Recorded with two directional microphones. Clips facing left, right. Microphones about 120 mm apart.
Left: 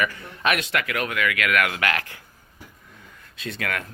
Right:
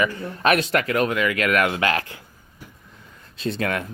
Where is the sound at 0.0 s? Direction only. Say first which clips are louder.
Right 4 dB; 30° right (ahead or behind).